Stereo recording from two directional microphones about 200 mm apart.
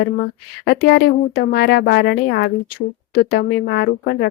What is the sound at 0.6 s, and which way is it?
Speech, 55° left (ahead or behind).